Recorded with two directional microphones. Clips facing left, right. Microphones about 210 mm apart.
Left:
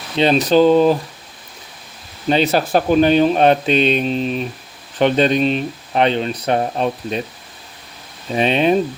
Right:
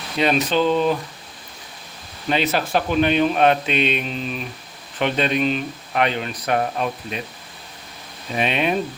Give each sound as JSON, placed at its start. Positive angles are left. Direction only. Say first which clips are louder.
{"t": 0.2, "sound": "speech", "louder": "left 6 dB", "side_deg": 35}
{"t": 2.3, "sound": "speech", "louder": "left 5 dB", "side_deg": 35}
{"t": 8.3, "sound": "speech", "louder": "left 6 dB", "side_deg": 35}